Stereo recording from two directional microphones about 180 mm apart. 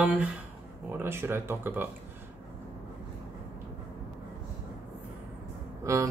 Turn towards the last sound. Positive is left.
turn(degrees=-15)  # may be behind; listen again after turning